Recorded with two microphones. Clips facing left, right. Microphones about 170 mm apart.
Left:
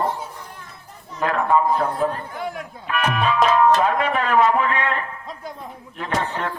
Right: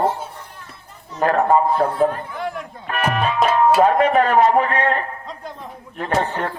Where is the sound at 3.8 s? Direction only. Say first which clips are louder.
Right 6 dB; 40° right (ahead or behind).